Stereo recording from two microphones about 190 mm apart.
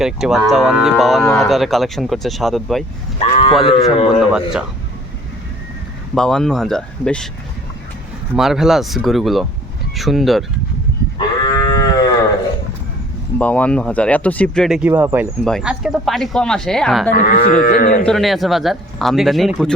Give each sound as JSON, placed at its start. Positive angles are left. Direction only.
{"t": 0.0, "sound": "cattle", "side_deg": 0}
{"t": 3.2, "sound": "sheep", "side_deg": 30}
{"t": 3.6, "sound": "speech", "side_deg": 25}
{"t": 4.2, "sound": "cattle", "side_deg": -5}
{"t": 6.1, "sound": "cattle", "side_deg": 5}
{"t": 8.4, "sound": "cattle", "side_deg": 0}
{"t": 11.4, "sound": "livestock", "side_deg": 20}
{"t": 13.4, "sound": "cattle", "side_deg": 5}
{"t": 15.4, "sound": "cattle", "side_deg": 0}
{"t": 17.2, "sound": "speech", "side_deg": 45}
{"t": 18.0, "sound": "cattle", "side_deg": 0}